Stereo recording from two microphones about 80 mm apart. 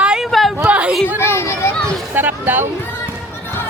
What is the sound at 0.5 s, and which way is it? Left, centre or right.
Speech, right.